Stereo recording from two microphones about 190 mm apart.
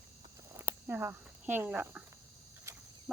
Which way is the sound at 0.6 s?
10° right (ahead or behind).